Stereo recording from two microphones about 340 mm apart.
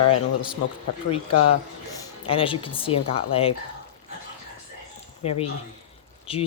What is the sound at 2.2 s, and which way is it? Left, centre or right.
Speech, centre.